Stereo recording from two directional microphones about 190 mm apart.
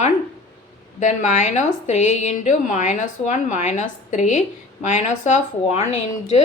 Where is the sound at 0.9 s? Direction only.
40° left (ahead or behind).